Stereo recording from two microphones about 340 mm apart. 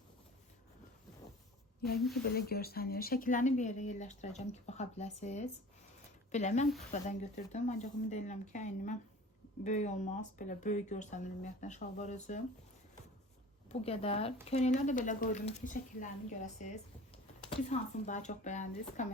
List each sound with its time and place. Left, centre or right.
2.0 s a woman's voice: centre
2.3 s speech: left
13.8 s speech: centre